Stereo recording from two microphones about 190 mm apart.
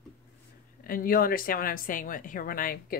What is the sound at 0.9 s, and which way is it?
Speech, 50° left (ahead or behind).